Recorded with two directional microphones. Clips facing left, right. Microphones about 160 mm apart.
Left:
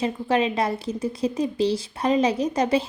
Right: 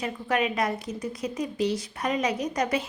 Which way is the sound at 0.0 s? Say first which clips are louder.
Left 5 dB; 30° left (ahead or behind).